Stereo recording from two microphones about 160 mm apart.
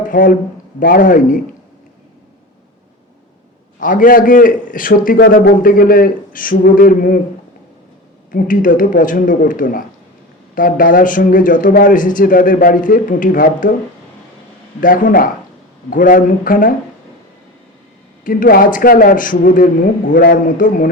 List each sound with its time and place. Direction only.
0.1 s a man's voice: 60° left (ahead or behind)
3.8 s a man's voice: 55° left (ahead or behind)
8.3 s a man's voice: 60° left (ahead or behind)
14.8 s a man's voice: 60° left (ahead or behind)
18.2 s a man's voice: 60° left (ahead or behind)